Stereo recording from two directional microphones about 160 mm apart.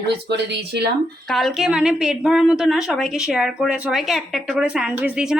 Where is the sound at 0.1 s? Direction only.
90° right.